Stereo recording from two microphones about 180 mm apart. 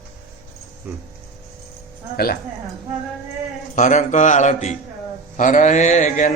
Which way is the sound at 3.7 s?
40° left (ahead or behind).